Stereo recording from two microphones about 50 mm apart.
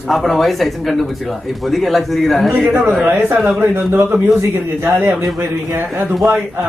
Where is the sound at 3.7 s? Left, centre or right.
Right.